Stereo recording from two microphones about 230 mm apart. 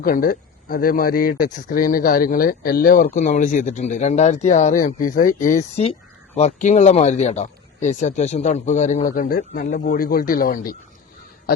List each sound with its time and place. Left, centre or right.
0.0 s speech: left